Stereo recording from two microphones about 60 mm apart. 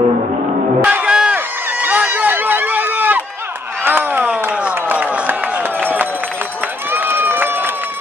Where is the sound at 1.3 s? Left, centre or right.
Right.